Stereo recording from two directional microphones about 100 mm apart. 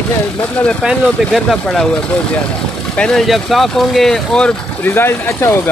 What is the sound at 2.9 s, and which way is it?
Speech, 5° left (ahead or behind).